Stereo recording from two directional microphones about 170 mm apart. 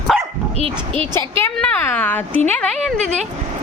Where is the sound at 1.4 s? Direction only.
10° left (ahead or behind).